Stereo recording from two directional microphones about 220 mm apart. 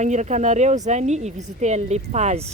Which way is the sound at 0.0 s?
35° right (ahead or behind).